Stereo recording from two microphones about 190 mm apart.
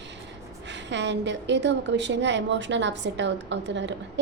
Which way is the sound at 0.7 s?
70° right (ahead or behind).